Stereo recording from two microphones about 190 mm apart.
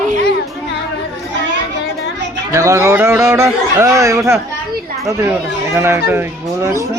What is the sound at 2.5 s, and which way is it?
Speech, 15° right (ahead or behind).